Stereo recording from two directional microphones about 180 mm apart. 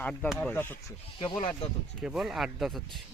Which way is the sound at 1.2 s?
30° left (ahead or behind).